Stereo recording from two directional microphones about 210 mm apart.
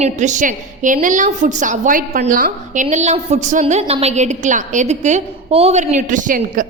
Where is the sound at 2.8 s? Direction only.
30° right (ahead or behind).